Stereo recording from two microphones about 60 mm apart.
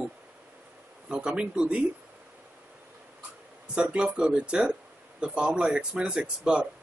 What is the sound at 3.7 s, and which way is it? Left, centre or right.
Speech, centre.